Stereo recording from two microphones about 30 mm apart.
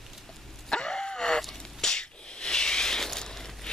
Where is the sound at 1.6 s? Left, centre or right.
Centre.